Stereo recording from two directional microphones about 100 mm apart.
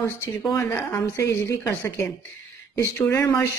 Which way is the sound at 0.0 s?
25° left (ahead or behind).